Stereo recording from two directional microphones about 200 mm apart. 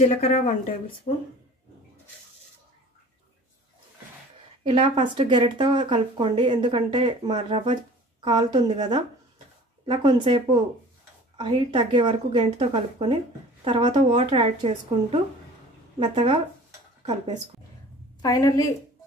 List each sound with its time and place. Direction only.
0.0 s speech: 30° left (ahead or behind)
4.6 s speech: 25° right (ahead or behind)
18.2 s a woman's voice: 15° left (ahead or behind)